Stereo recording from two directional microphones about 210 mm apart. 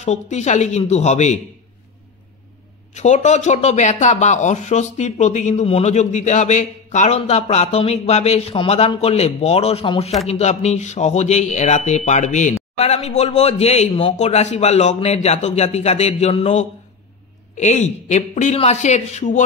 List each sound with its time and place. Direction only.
0.0 s speech: 30° left (ahead or behind)
2.9 s speech: 35° left (ahead or behind)